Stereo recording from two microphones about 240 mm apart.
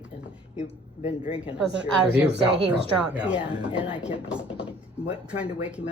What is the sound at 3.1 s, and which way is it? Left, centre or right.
Speech, centre.